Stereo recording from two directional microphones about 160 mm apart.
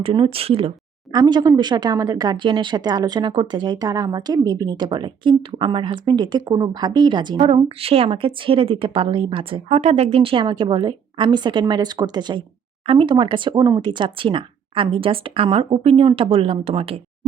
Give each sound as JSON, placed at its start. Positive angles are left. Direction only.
{"t": 0.0, "sound": "speech", "side_deg": -35}
{"t": 1.1, "sound": "speech", "side_deg": -25}